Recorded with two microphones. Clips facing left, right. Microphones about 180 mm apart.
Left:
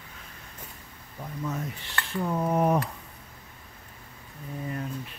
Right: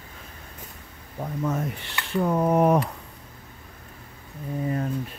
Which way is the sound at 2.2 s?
90° right.